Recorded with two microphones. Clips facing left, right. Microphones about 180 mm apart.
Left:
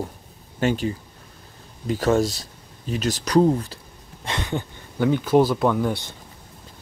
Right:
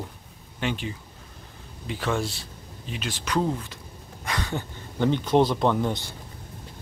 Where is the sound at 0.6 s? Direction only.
45° left (ahead or behind).